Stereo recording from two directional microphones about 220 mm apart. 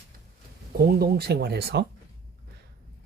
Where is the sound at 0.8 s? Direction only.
45° right (ahead or behind).